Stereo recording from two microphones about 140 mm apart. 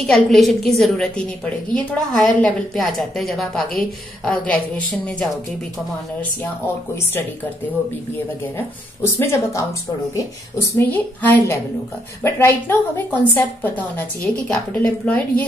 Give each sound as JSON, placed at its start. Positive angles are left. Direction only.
{"t": 0.0, "sound": "a woman's voice", "side_deg": 0}
{"t": 8.5, "sound": "speech", "side_deg": 20}
{"t": 10.8, "sound": "a woman's voice", "side_deg": 15}